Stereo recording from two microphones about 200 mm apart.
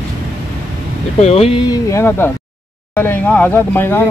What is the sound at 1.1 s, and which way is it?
Speech, 30° left (ahead or behind).